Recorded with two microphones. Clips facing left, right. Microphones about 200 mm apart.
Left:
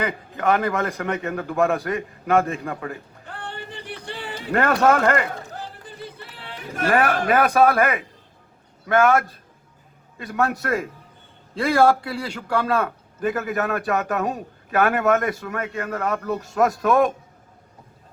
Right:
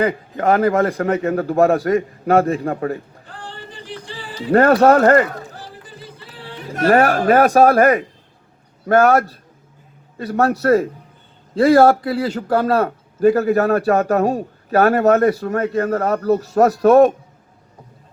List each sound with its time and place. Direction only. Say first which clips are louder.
0.0 s a man's voice: right 6 dB; 35° right (ahead or behind)
3.2 s music: left 5 dB; 60° left (ahead or behind)
4.5 s a man's voice: right 7 dB; 35° right (ahead or behind)
5.8 s music: left 1 dB; 60° left (ahead or behind)
6.7 s a man's voice: right 6 dB; 40° right (ahead or behind)